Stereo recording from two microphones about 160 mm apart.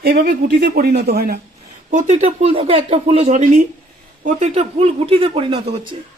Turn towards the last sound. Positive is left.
turn(degrees=-35)  # may be behind; listen again after turning